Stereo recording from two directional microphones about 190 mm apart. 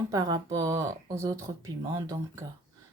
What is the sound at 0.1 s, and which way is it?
Speech, 20° right (ahead or behind).